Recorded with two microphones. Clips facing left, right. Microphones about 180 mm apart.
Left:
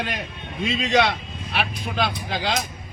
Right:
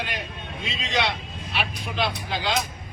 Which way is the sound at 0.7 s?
55° left (ahead or behind).